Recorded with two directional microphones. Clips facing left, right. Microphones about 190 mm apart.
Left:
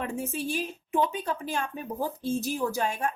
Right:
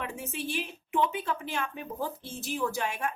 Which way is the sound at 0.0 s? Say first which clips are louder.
Left 4 dB; 40° left (ahead or behind).